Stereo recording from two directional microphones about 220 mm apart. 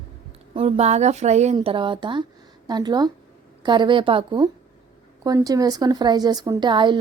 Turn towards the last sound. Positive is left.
turn(degrees=-20)  # may be behind; listen again after turning